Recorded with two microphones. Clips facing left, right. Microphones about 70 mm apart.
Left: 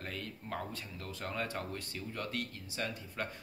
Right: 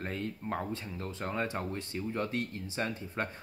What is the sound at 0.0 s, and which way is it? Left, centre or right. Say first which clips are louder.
Speech: right 6 dB; right.